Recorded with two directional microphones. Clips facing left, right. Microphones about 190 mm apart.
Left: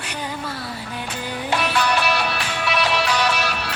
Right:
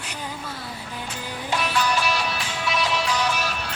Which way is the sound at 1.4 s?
65° left (ahead or behind).